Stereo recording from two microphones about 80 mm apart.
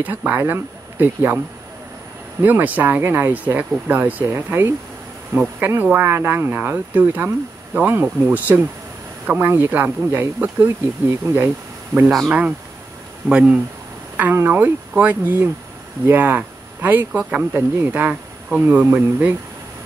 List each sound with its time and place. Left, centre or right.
0.0 s speech: right
2.4 s speech: right
12.3 s speech: centre
14.3 s speech: right
17.2 s speech: centre
17.6 s speech: right